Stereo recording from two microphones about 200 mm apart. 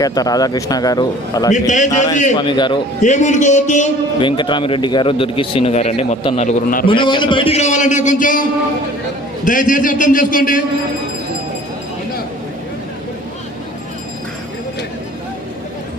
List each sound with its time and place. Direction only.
0.0 s a man's voice: 20° left (ahead or behind)
1.5 s a man's voice: 40° left (ahead or behind)
2.3 s a man's voice: 25° left (ahead or behind)
3.0 s a man's voice: 35° left (ahead or behind)
4.2 s a man's voice: 25° left (ahead or behind); by 6.8 s 40° left (ahead or behind)
6.8 s a man's voice: 25° left (ahead or behind); by 10.6 s 45° left (ahead or behind)